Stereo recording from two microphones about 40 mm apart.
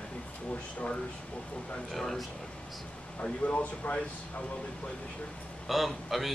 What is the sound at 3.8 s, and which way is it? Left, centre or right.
Speech, left.